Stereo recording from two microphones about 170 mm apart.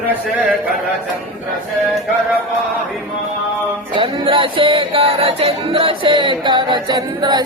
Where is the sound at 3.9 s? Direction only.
30° right (ahead or behind).